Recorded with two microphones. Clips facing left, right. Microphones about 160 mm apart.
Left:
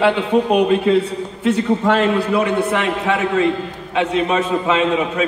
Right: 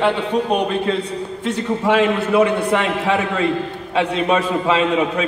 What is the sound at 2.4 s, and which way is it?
A man's voice, 30° right (ahead or behind).